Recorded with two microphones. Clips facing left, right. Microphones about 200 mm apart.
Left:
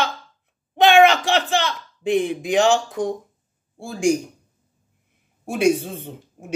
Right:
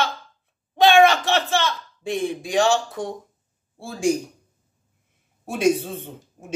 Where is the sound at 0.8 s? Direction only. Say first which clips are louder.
Left 1 dB; 15° left (ahead or behind).